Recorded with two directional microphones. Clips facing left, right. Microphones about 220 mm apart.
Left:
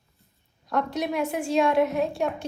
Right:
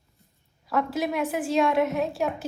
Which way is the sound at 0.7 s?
5° right (ahead or behind).